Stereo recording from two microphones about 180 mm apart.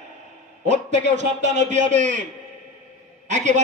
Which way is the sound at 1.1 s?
40° right (ahead or behind).